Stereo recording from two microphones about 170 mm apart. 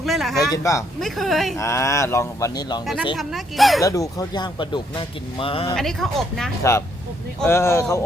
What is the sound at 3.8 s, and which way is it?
Speech, 20° left (ahead or behind).